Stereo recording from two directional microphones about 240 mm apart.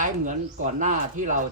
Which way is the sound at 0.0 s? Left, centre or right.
Right.